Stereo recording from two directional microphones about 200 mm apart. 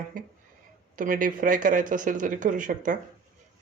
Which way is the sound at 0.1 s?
40° right (ahead or behind).